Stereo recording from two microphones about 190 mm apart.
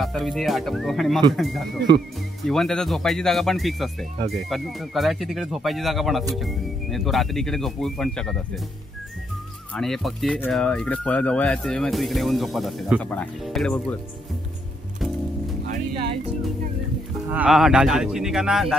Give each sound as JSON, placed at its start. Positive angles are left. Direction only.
{"t": 0.0, "sound": "speech", "side_deg": 0}
{"t": 9.8, "sound": "speech", "side_deg": 0}
{"t": 15.6, "sound": "music", "side_deg": -55}
{"t": 17.3, "sound": "speech", "side_deg": -5}